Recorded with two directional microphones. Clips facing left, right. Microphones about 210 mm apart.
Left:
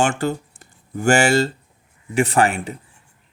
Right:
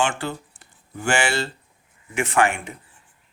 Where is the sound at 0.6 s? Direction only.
45° left (ahead or behind).